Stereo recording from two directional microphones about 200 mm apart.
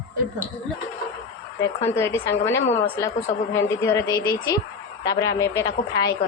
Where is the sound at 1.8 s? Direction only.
10° left (ahead or behind).